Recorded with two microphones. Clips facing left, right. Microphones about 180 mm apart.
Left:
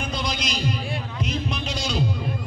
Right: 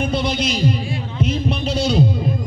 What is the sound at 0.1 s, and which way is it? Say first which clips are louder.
Speech: right 8 dB; 30° right (ahead or behind).